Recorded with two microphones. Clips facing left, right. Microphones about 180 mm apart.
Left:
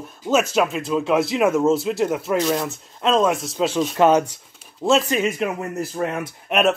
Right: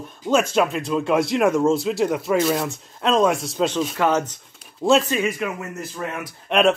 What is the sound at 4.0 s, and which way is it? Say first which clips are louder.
Speech: left 5 dB; 15° left (ahead or behind).